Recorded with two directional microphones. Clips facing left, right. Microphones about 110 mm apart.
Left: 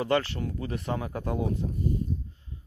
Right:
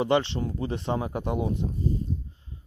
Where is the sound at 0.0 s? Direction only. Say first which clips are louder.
Right 3 dB; 25° right (ahead or behind).